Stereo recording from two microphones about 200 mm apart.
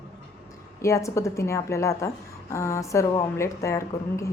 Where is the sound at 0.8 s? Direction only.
15° left (ahead or behind).